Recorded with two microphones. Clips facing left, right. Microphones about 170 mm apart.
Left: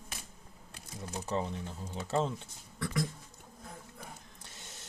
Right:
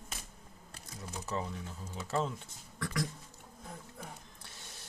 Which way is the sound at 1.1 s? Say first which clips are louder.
Left 4 dB; 30° left (ahead or behind).